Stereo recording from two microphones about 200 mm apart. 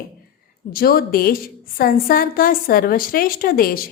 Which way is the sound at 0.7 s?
45° left (ahead or behind).